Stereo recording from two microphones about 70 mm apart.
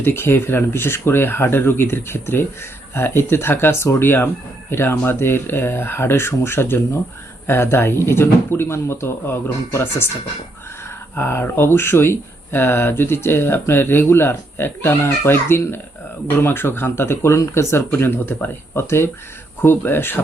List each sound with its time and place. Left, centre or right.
0.0 s speech: left
11.1 s speech: left